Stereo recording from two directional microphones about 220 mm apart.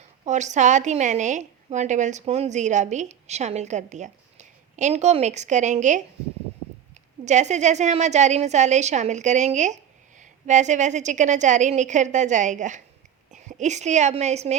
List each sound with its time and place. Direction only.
0.3 s a woman's voice: 30° right (ahead or behind)
7.3 s a woman's voice: 30° right (ahead or behind)